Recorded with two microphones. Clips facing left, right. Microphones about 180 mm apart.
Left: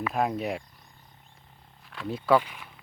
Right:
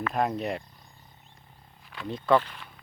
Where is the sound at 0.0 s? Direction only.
5° left (ahead or behind).